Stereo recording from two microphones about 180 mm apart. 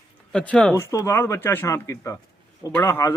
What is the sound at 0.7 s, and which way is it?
Speech, 15° left (ahead or behind).